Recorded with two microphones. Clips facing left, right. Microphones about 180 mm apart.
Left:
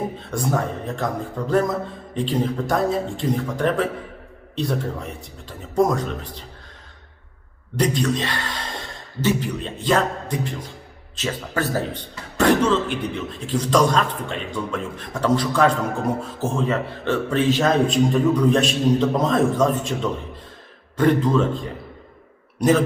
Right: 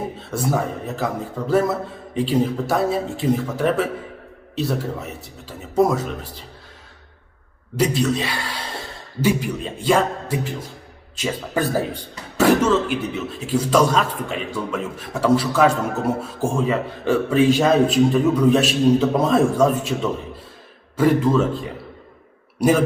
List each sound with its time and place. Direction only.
0.2 s a man's voice: 5° right (ahead or behind)
7.8 s a man's voice: 5° right (ahead or behind)
22.6 s a man's voice: 5° right (ahead or behind)